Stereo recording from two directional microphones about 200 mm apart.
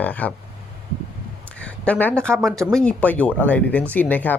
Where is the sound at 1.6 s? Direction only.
5° left (ahead or behind).